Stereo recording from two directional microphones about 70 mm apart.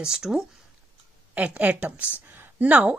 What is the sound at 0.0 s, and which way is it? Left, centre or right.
Speech, centre.